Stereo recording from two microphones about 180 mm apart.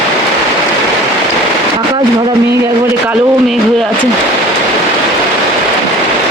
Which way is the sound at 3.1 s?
Centre (ahead or behind).